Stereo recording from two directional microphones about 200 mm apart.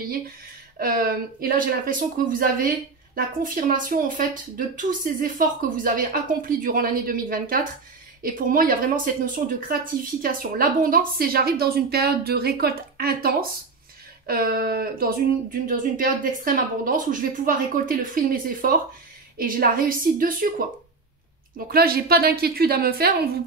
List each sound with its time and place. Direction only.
0.7 s a woman's voice: 45° right (ahead or behind)
21.6 s a woman's voice: 50° right (ahead or behind)